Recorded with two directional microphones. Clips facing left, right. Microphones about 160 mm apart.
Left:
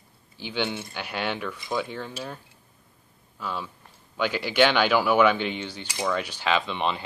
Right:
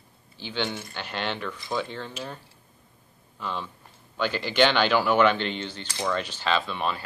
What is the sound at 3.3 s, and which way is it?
Speech, 5° left (ahead or behind).